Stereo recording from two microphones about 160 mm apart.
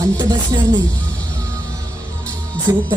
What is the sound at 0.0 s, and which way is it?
Speech, 25° right (ahead or behind).